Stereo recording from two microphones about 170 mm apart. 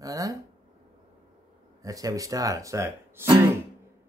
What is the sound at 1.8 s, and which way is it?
Speech, 20° right (ahead or behind).